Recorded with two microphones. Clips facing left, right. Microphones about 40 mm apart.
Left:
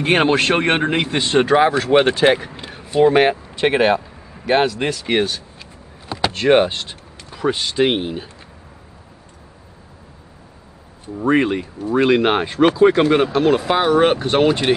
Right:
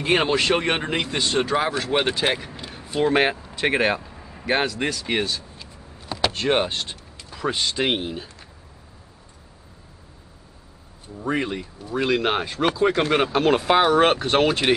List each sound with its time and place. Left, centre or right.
0.4 s speech: left
2.2 s speech: centre
2.5 s a sound: left
3.0 s speech: centre
3.6 s speech: left
5.2 s vehicle: left
6.0 s door: centre
7.3 s speech: centre
11.1 s speech: left
13.3 s speech: centre
13.7 s speech: centre